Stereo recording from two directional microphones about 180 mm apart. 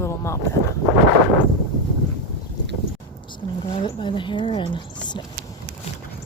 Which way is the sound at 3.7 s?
25° left (ahead or behind).